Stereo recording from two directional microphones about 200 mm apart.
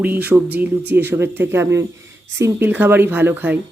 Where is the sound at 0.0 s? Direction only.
5° right (ahead or behind).